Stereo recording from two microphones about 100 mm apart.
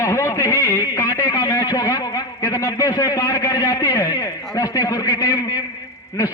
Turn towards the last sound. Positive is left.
turn(degrees=35)  # may be behind; listen again after turning